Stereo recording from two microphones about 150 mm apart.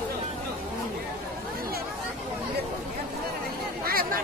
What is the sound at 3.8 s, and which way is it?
Chatter, 80° right.